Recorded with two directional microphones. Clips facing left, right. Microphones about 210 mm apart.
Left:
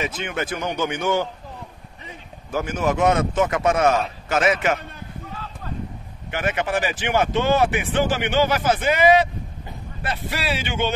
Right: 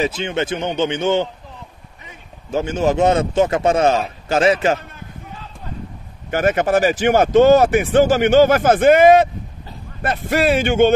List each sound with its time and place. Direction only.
0.0 s a man's voice: 30° right (ahead or behind)
2.5 s a man's voice: 25° right (ahead or behind)
6.3 s speech: 40° right (ahead or behind)